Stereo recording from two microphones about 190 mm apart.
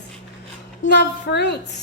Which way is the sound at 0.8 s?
65° left (ahead or behind).